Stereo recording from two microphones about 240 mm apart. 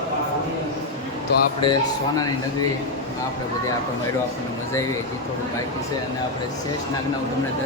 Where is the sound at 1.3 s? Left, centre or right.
Left.